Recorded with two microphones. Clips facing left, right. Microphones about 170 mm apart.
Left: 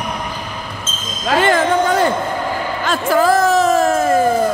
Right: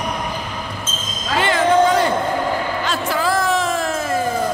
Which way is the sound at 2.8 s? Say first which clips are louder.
Left 6 dB; 50° left (ahead or behind).